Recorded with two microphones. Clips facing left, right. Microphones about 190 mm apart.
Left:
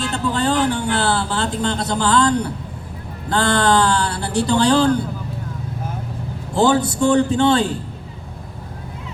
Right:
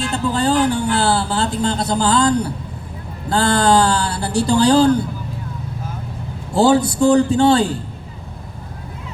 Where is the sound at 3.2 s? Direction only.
35° right (ahead or behind).